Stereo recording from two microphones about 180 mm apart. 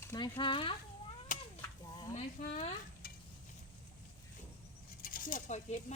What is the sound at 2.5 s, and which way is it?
Speech, 35° left (ahead or behind).